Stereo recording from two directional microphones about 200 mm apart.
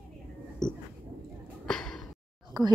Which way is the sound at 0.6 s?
5° left (ahead or behind).